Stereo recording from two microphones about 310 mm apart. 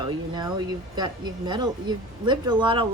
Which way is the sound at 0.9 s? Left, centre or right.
Centre.